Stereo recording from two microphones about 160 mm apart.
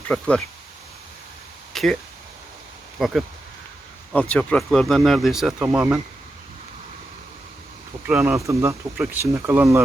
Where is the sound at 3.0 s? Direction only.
Centre (ahead or behind).